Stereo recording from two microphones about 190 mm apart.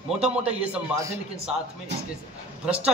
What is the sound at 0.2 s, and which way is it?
Speech, 5° right (ahead or behind).